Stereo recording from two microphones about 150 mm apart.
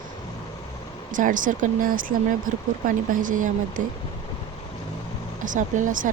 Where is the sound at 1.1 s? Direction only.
60° right (ahead or behind).